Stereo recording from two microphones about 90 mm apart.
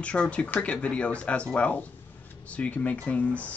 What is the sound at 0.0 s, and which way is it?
Speech, 15° left (ahead or behind).